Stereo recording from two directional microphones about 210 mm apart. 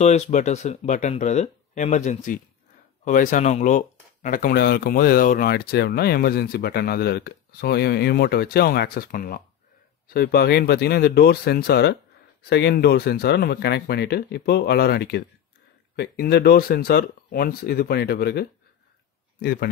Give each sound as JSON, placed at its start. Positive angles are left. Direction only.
{"t": 0.0, "sound": "speech", "side_deg": 35}